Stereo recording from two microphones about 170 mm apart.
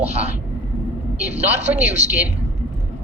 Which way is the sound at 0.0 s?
40° right (ahead or behind).